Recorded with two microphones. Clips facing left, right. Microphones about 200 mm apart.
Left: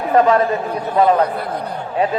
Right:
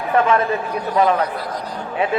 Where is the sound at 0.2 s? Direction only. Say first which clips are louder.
Left 4 dB; 40° left (ahead or behind).